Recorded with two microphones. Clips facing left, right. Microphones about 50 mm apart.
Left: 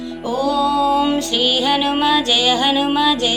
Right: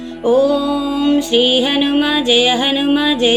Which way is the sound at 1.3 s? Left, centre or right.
Right.